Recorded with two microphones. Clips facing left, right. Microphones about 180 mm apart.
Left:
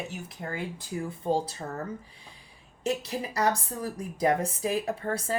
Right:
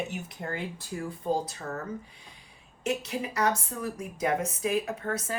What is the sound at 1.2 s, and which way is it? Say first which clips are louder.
Speech: left 1 dB; 30° left (ahead or behind).